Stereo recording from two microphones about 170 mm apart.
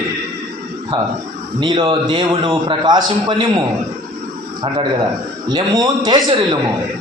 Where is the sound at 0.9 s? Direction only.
30° right (ahead or behind).